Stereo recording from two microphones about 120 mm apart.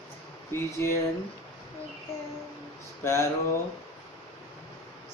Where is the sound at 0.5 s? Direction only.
20° left (ahead or behind).